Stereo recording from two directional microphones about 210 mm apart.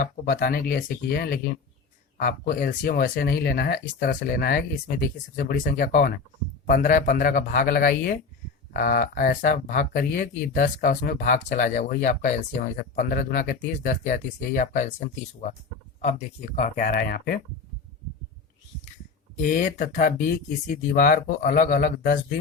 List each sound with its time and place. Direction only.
0.0 s speech: 45° left (ahead or behind)
19.4 s speech: 40° left (ahead or behind)